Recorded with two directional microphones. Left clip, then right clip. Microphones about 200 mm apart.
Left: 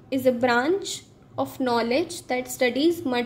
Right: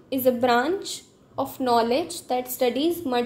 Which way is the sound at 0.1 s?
10° left (ahead or behind).